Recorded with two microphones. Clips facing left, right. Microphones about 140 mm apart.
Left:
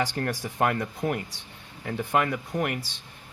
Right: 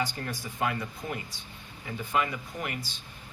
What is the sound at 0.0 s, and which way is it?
Speech, 85° left.